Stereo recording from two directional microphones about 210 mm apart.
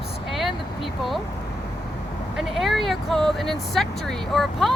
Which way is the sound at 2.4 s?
Centre (ahead or behind).